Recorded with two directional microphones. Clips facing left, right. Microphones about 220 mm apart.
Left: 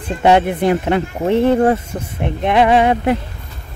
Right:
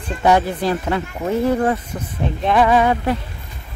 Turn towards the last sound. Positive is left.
turn(degrees=20)  # may be behind; listen again after turning